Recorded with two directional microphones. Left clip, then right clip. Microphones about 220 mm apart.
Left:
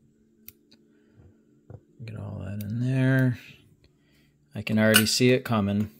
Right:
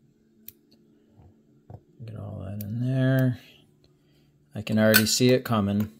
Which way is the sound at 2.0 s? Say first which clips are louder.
Even; 15° left (ahead or behind).